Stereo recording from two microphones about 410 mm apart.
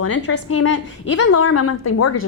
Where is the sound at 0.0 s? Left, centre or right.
Left.